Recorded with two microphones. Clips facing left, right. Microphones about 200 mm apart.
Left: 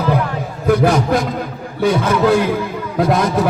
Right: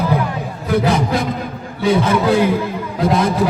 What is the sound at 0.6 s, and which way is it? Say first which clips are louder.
Speech: left 3 dB; 55° left (ahead or behind).